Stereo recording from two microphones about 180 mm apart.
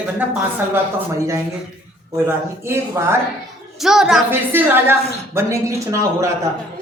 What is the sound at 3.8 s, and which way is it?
A woman's voice, centre (ahead or behind).